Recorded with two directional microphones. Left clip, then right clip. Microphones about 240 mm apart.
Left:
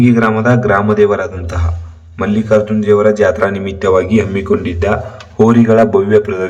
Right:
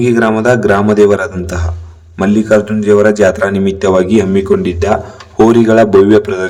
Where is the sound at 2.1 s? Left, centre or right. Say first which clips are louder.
Right 2 dB; right.